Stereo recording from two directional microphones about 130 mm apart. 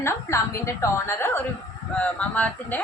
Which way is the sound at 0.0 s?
20° left (ahead or behind).